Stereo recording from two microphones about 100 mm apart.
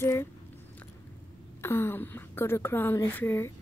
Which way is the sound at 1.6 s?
25° left (ahead or behind).